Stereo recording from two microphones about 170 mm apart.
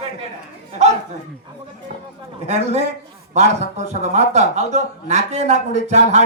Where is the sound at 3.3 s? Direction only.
40° right (ahead or behind).